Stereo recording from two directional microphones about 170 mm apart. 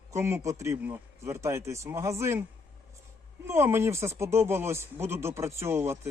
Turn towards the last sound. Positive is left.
turn(degrees=-15)  # may be behind; listen again after turning